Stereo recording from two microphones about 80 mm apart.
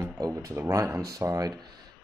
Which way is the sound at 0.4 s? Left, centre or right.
Right.